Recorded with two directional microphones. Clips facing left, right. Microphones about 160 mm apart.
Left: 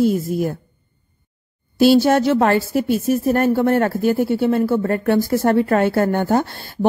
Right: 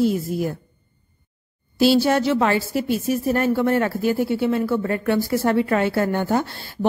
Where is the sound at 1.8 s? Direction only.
50° left (ahead or behind).